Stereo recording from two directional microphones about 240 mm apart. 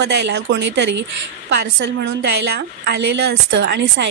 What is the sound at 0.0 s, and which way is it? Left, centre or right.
A woman's voice, right.